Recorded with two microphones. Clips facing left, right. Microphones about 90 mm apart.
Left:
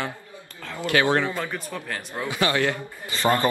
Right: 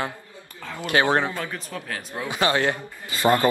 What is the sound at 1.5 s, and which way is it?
Speech, 5° left (ahead or behind).